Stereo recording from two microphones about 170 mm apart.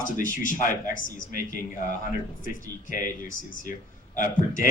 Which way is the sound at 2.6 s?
55° left (ahead or behind).